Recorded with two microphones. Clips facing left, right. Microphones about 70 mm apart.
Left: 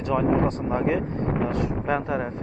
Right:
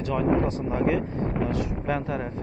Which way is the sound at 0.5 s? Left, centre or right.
Left.